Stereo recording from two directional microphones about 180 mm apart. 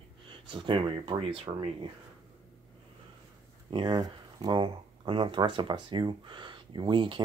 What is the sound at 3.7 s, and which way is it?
Speech, 25° right (ahead or behind).